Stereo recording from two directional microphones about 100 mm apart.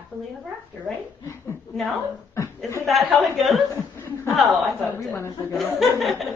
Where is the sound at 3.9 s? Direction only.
25° left (ahead or behind).